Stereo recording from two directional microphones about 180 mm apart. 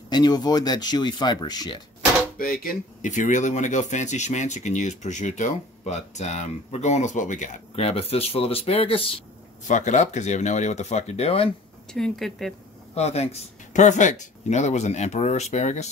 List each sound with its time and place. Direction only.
0.1 s speech: 20° left (ahead or behind)
2.3 s speech: 55° left (ahead or behind); by 9.0 s 30° left (ahead or behind)
9.7 s speech: 45° left (ahead or behind)
11.9 s speech: centre (ahead or behind)
12.9 s speech: 35° left (ahead or behind)